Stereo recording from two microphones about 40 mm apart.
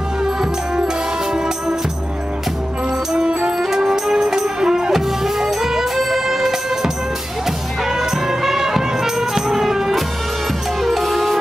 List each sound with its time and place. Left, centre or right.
0.2 s music: centre
3.3 s music: right
3.6 s music: centre